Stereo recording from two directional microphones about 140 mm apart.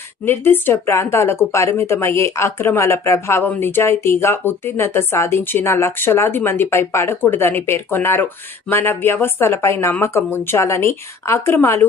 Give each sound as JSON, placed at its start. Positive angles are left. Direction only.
{"t": 0.3, "sound": "a woman's voice", "side_deg": 15}